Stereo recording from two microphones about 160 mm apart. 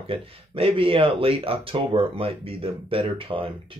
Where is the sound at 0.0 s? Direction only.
35° right (ahead or behind).